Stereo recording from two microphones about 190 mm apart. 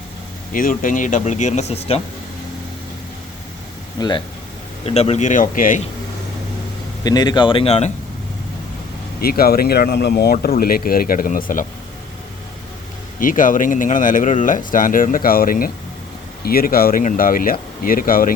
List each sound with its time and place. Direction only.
0.5 s speech: 45° left (ahead or behind)
4.0 s speech: 20° left (ahead or behind)
4.9 s speech: 35° left (ahead or behind)
7.0 s speech: 20° left (ahead or behind)
9.2 s speech: 50° left (ahead or behind)
13.1 s speech: 45° left (ahead or behind)